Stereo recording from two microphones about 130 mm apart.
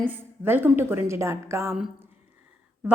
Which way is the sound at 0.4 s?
15° right (ahead or behind).